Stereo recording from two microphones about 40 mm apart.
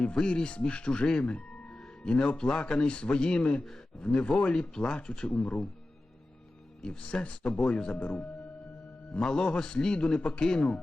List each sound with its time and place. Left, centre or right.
0.0 s speech: left
1.0 s music: left
2.0 s speech: left
7.0 s speech: left
9.2 s speech: centre